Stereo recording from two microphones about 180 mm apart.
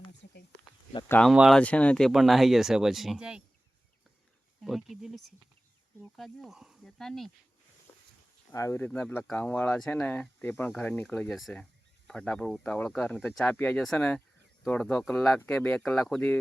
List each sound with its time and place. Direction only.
0.2 s snake: 60° left (ahead or behind)
1.0 s speech: 10° left (ahead or behind)
1.3 s speech: centre (ahead or behind)
4.6 s speech: centre (ahead or behind)
8.5 s speech: 15° left (ahead or behind)